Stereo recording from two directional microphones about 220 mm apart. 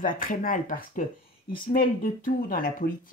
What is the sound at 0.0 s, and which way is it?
Speech, 40° left (ahead or behind).